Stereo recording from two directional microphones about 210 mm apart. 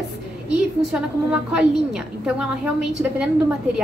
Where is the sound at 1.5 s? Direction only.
5° right (ahead or behind).